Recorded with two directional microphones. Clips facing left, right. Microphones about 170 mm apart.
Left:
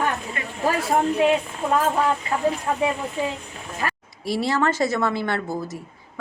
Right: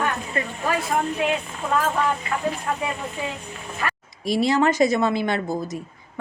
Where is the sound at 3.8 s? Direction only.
35° left (ahead or behind).